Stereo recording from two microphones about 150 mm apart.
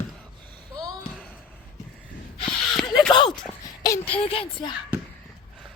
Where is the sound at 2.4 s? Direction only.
5° left (ahead or behind).